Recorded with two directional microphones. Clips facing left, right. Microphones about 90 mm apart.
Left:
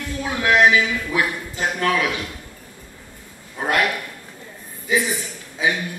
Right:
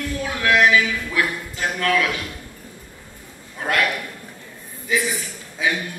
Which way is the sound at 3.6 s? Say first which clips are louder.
Left 1 dB; 25° left (ahead or behind).